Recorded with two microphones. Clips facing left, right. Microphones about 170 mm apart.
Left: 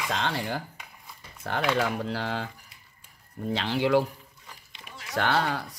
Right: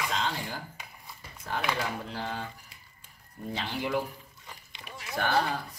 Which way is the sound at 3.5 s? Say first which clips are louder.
Left 8 dB; 85° left.